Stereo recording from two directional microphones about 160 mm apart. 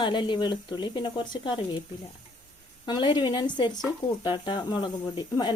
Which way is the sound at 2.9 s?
30° left (ahead or behind).